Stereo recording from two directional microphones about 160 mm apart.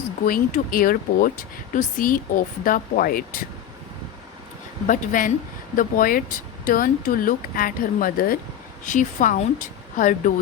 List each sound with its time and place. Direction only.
0.3 s speech: 65° left (ahead or behind)
4.9 s speech: 55° left (ahead or behind)
8.8 s speech: 55° left (ahead or behind)